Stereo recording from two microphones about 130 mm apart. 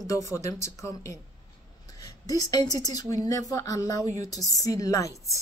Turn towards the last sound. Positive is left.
turn(degrees=25)  # may be behind; listen again after turning